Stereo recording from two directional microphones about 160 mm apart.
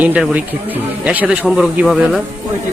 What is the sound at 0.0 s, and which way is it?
Speech, 5° right (ahead or behind).